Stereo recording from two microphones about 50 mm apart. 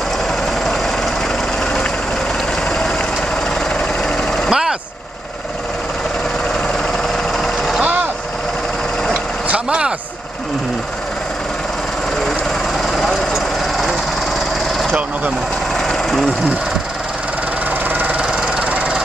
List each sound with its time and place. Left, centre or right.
4.0 s vehicle: centre
4.5 s vehicle: centre
7.3 s jackhammer: centre
9.1 s vehicle: right
12.8 s vehicle: centre
13.3 s vehicle: centre
15.7 s vehicle: centre
17.8 s engine knocking: right
18.2 s engine knocking: centre